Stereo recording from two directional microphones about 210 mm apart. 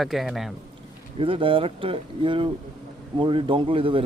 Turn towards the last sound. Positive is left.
turn(degrees=-25)  # may be behind; listen again after turning